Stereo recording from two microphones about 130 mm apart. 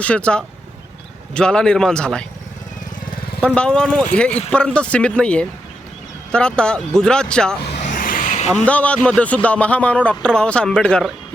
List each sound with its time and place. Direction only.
0.0 s a man's voice: 10° left (ahead or behind)
3.4 s a man's voice: 5° left (ahead or behind)
7.8 s vehicle: 80° left
8.6 s a man's voice: 10° left (ahead or behind)